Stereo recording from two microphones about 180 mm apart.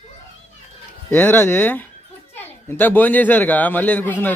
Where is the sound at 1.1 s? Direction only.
10° left (ahead or behind).